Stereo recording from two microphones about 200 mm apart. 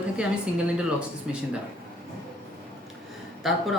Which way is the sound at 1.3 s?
5° right (ahead or behind).